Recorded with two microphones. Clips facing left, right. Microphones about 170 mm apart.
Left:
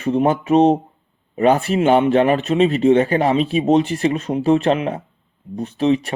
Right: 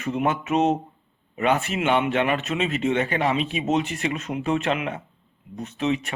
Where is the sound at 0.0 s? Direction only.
30° left (ahead or behind).